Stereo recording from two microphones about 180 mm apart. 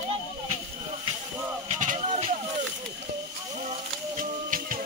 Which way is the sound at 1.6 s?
45° right (ahead or behind).